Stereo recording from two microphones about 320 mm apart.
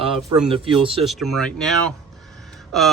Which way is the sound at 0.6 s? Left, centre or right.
Centre.